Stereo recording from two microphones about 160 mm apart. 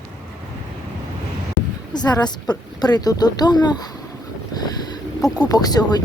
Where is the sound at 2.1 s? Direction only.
25° left (ahead or behind).